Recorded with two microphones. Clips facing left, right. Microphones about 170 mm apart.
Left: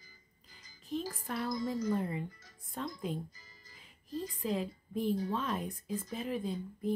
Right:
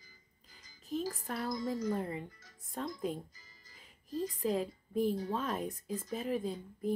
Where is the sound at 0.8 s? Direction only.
40° right (ahead or behind).